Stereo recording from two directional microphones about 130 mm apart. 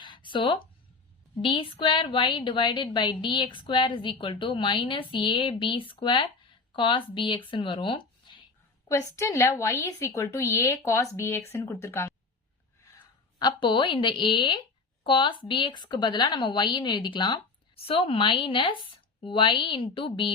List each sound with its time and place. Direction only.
0.0 s a sound: 40° left (ahead or behind)
1.4 s a woman's voice: 40° left (ahead or behind)
8.9 s a woman's voice: 20° left (ahead or behind)
13.4 s a woman's voice: 40° left (ahead or behind)